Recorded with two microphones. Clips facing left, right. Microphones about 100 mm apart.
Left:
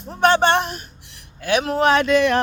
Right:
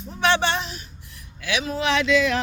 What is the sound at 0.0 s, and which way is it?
Speech, 60° left (ahead or behind).